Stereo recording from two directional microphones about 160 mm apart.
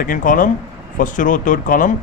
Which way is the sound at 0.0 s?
55° left (ahead or behind).